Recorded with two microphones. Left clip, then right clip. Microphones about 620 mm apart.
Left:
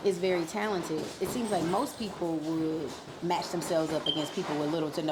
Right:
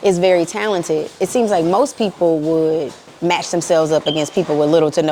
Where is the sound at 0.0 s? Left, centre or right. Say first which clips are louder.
Right 15 dB; right.